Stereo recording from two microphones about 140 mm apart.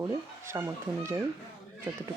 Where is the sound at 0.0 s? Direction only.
25° right (ahead or behind).